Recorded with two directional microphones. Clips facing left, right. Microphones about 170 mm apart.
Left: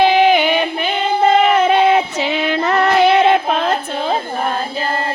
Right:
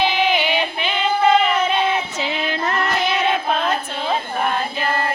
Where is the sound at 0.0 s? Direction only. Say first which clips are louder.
Left 7 dB; 50° left (ahead or behind).